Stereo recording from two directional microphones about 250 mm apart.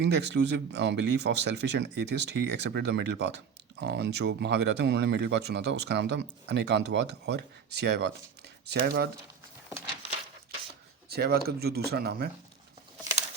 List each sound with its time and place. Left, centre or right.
0.0 s speech: right
11.1 s speech: right